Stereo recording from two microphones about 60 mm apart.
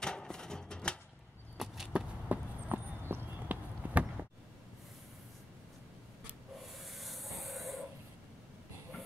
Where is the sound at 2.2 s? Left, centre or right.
Right.